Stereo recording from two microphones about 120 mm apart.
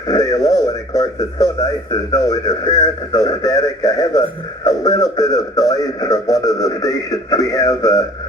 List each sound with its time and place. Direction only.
0.1 s radio: 30° left (ahead or behind)
2.1 s speech: 30° left (ahead or behind)